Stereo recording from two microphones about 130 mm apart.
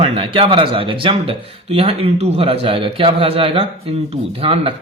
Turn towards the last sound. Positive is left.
turn(degrees=-45)  # may be behind; listen again after turning